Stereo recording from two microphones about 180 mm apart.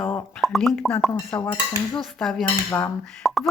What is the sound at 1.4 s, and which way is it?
Dishes, 20° left (ahead or behind).